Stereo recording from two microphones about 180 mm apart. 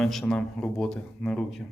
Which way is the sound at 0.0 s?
Centre (ahead or behind).